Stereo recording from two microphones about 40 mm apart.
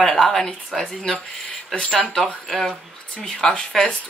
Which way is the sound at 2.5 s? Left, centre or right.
Centre.